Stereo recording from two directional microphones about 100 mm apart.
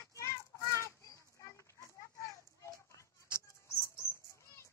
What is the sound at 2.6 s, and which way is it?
Bird, 30° left (ahead or behind).